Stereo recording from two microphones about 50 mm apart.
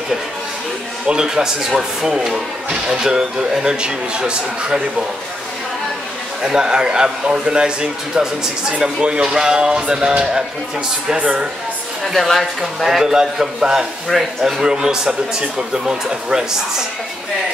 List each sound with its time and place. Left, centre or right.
1.0 s speech: centre
6.4 s speech: centre
12.0 s speech: centre